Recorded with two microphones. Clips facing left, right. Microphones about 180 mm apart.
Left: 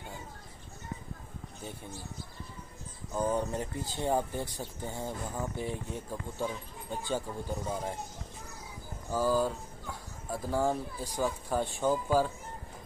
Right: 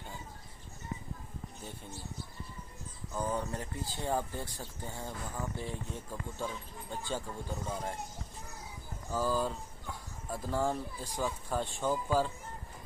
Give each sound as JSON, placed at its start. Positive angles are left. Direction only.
{"t": 3.1, "sound": "speech", "side_deg": 20}
{"t": 9.1, "sound": "speech", "side_deg": 5}